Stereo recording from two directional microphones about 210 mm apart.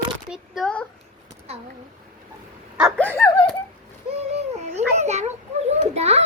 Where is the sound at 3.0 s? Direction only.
10° left (ahead or behind).